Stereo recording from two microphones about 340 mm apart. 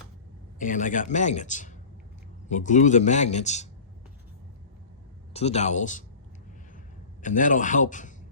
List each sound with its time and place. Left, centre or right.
0.6 s a man's voice: left
5.3 s a man's voice: centre
7.2 s a man's voice: left